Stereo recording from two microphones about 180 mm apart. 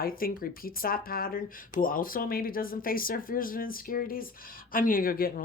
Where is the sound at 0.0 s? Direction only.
55° left (ahead or behind).